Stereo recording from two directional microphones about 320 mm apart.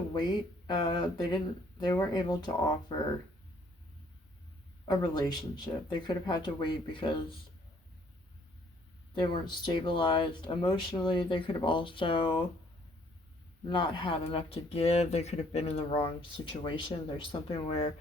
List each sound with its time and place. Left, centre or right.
0.7 s speech: centre
4.9 s speech: centre
9.1 s speech: centre
13.7 s speech: centre